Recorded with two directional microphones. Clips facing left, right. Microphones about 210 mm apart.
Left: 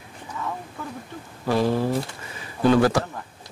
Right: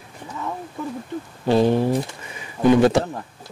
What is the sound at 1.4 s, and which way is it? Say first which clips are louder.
Speech: right 4 dB; 25° right (ahead or behind).